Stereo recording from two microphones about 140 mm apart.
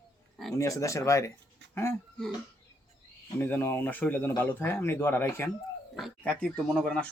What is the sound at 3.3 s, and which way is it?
Speech, 15° left (ahead or behind).